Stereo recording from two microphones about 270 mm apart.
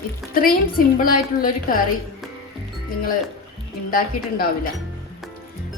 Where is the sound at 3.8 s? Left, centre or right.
Left.